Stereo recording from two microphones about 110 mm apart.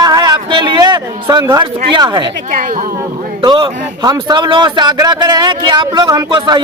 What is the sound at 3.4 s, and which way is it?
A man's voice, 45° right (ahead or behind).